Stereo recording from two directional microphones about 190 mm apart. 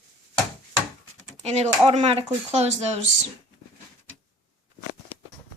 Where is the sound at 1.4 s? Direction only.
35° right (ahead or behind).